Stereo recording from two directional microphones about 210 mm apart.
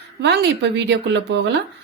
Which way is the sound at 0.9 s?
55° right (ahead or behind).